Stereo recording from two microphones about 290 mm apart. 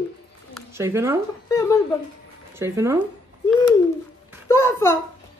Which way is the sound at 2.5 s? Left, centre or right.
Centre.